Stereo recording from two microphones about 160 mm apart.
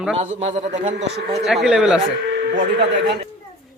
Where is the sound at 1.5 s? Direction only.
5° right (ahead or behind).